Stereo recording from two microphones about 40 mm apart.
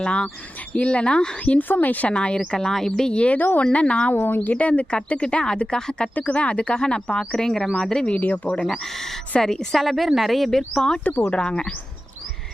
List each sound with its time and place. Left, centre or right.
0.0 s speech: left
1.5 s a woman's voice: left
2.0 s speech: left
2.5 s speech: centre
3.1 s speech: left
4.1 s speech: left
4.4 s speech: left
6.1 s speech: left; by 8.0 s centre
8.2 s speech: left
8.7 s speech: centre
9.7 s speech: centre
10.8 s speech: left